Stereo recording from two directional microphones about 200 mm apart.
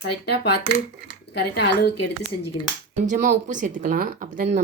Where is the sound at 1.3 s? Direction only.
55° left (ahead or behind).